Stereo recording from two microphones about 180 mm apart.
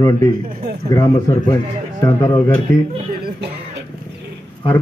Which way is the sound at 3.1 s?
60° right (ahead or behind).